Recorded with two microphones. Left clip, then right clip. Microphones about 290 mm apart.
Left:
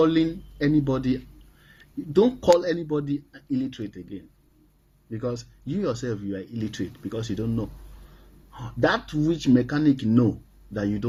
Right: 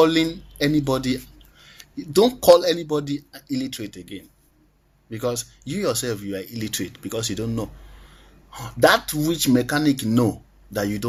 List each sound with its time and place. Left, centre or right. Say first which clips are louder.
0.0 s speech: right 3 dB; right